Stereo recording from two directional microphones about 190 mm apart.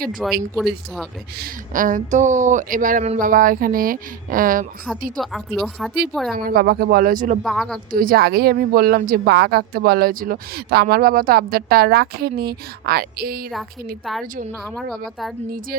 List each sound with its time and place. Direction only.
0.5 s a woman's voice: centre (ahead or behind)
1.4 s speech: 45° right (ahead or behind)
5.2 s a woman's voice: centre (ahead or behind)
6.3 s speech: 50° right (ahead or behind)
7.4 s a woman's voice: centre (ahead or behind)
7.9 s speech: 50° right (ahead or behind)
13.5 s a woman's voice: centre (ahead or behind)